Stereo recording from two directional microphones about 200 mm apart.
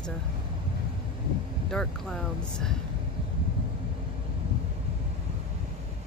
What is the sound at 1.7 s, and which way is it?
Speech, centre (ahead or behind).